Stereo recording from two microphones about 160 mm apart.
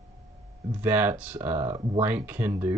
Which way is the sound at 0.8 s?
10° right (ahead or behind).